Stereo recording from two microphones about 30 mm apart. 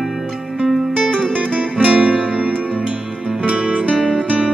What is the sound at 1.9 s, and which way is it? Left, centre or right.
Music, right.